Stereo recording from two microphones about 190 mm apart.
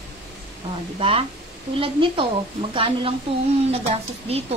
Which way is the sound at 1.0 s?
30° right (ahead or behind).